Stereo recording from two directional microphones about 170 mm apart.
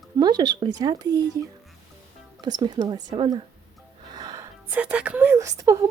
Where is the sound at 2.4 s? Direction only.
25° right (ahead or behind).